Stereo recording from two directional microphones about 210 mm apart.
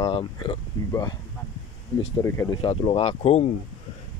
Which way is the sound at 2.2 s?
15° left (ahead or behind).